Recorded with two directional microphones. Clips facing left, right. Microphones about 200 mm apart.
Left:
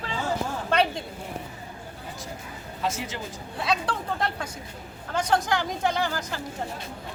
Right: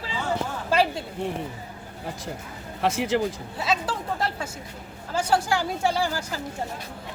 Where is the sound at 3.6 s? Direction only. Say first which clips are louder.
Even; centre (ahead or behind).